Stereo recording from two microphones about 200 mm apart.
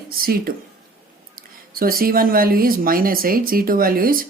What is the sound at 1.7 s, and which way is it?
Speech, 45° right (ahead or behind).